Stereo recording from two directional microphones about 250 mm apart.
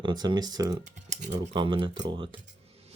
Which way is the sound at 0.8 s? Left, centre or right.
Right.